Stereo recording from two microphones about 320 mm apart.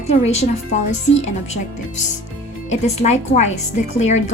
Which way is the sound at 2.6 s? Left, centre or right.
Left.